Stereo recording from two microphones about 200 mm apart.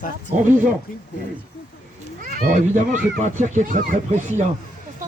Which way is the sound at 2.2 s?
45° right (ahead or behind).